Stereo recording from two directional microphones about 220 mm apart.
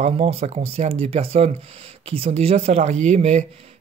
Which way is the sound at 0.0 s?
25° right (ahead or behind).